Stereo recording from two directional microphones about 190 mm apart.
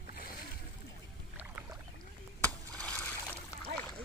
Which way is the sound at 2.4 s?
5° left (ahead or behind).